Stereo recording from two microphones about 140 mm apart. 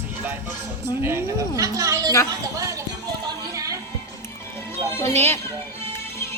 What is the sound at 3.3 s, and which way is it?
Music, 25° right (ahead or behind).